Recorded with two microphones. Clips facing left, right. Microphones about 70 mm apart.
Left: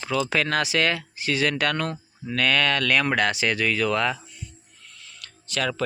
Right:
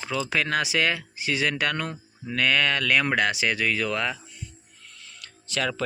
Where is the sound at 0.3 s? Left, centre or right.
Centre.